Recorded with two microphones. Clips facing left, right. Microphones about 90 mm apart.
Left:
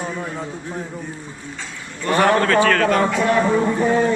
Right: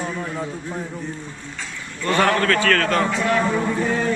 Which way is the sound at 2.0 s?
20° left (ahead or behind).